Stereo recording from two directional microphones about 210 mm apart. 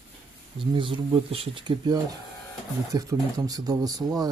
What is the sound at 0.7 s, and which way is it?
Speech, 25° right (ahead or behind).